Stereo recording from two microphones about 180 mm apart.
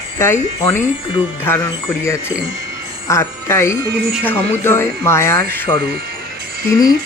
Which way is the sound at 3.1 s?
15° left (ahead or behind).